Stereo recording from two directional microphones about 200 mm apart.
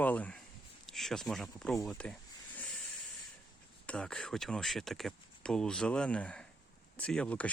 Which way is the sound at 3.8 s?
5° left (ahead or behind).